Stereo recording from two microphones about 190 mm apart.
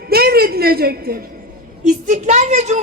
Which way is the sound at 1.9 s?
40° right (ahead or behind).